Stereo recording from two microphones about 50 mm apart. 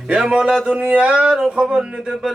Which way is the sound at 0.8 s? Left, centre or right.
Right.